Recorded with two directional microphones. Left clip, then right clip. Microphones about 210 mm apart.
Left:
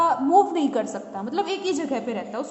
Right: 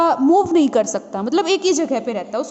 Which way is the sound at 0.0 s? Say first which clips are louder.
Right 3 dB; 35° right (ahead or behind).